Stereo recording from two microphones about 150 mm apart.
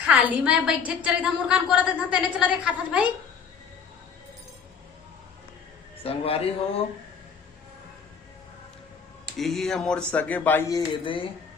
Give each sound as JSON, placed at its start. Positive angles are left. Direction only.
{"t": 0.0, "sound": "a woman's voice", "side_deg": -10}
{"t": 6.0, "sound": "a man's voice", "side_deg": 40}
{"t": 9.4, "sound": "speech", "side_deg": 0}
{"t": 10.7, "sound": "a man's voice", "side_deg": 30}